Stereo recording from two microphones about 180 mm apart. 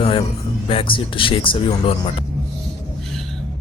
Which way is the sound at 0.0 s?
30° left (ahead or behind).